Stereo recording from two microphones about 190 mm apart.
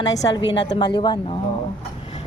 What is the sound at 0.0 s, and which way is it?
Speech, 20° left (ahead or behind).